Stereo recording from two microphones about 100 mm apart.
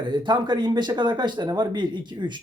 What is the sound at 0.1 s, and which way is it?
Speech, 50° right (ahead or behind).